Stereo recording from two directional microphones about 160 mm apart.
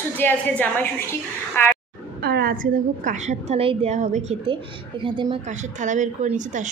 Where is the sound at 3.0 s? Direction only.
45° right (ahead or behind).